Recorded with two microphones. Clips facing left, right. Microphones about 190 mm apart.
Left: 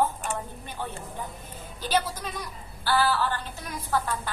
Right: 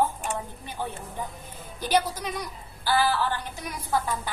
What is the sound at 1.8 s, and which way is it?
A woman's voice, 15° right (ahead or behind).